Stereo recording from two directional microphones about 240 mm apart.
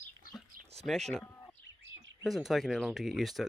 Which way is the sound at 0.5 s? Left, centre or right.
Right.